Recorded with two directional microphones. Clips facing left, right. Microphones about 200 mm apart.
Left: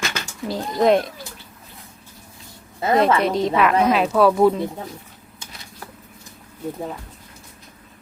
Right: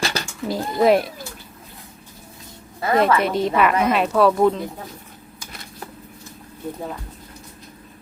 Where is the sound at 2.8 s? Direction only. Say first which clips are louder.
Left 1 dB; 20° left (ahead or behind).